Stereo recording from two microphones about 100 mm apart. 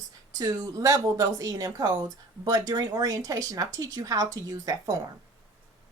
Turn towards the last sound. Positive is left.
turn(degrees=-35)  # may be behind; listen again after turning